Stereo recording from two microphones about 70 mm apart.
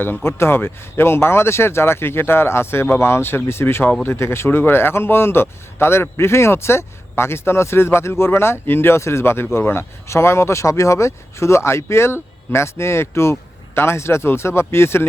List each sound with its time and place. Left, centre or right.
0.0 s speech: left